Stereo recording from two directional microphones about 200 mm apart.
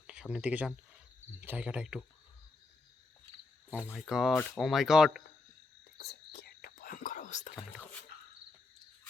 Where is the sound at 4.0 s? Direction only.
Centre (ahead or behind).